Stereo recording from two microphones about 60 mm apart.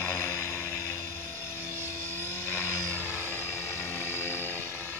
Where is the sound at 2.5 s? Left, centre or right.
Left.